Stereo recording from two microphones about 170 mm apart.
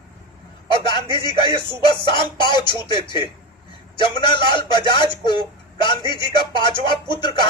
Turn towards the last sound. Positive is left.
turn(degrees=25)  # may be behind; listen again after turning